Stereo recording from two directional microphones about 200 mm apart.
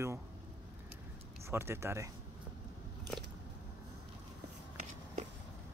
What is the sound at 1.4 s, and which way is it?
Speech, 10° right (ahead or behind).